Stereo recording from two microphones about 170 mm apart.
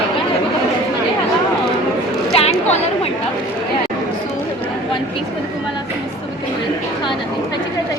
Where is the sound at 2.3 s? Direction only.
35° left (ahead or behind).